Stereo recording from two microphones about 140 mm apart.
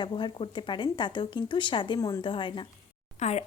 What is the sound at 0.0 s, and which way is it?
A woman's voice, 35° left (ahead or behind).